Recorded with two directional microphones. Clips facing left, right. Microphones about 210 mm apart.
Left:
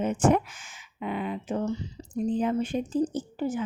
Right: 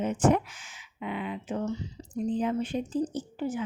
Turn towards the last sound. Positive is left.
turn(degrees=45)  # may be behind; listen again after turning